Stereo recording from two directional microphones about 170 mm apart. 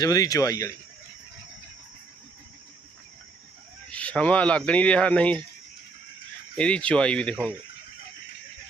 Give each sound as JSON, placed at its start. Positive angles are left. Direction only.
{"t": 0.0, "sound": "speech", "side_deg": 20}
{"t": 3.8, "sound": "speech", "side_deg": 5}
{"t": 6.6, "sound": "speech", "side_deg": 5}